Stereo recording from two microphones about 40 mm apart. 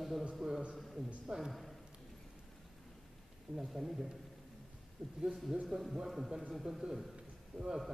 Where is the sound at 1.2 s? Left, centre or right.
Centre.